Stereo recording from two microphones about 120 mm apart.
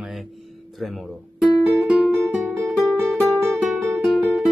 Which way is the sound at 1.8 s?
Centre (ahead or behind).